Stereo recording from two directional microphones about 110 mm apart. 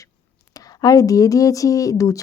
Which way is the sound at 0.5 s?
35° left (ahead or behind).